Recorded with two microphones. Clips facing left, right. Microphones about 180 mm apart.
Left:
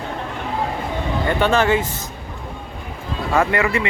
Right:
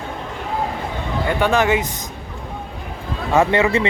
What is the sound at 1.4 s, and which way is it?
Speech, 15° right (ahead or behind).